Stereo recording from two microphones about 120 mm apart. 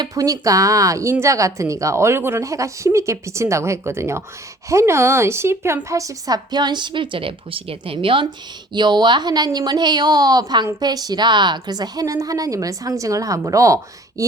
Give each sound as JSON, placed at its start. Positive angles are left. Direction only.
{"t": 0.0, "sound": "a woman's voice", "side_deg": -30}